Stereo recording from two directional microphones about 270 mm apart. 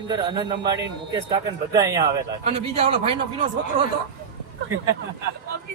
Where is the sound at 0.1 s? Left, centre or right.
Centre.